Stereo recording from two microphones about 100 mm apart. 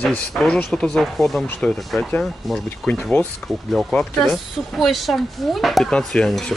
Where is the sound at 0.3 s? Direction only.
Centre (ahead or behind).